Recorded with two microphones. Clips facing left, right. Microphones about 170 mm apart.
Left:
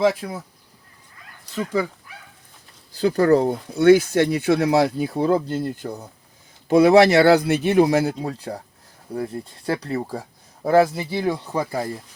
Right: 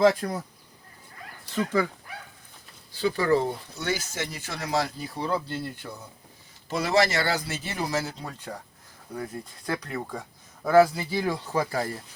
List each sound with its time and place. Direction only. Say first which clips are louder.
0.0 s speech: left 1 dB; 5° left (ahead or behind)
3.0 s speech: left 7 dB; 45° left (ahead or behind)
3.7 s speech: left 17 dB; 60° left (ahead or behind); by 6.1 s 40° left (ahead or behind)
6.7 s speech: left 11 dB; 60° left (ahead or behind)
8.2 s speech: left 9 dB; 35° left (ahead or behind); by 12.0 s 20° left (ahead or behind)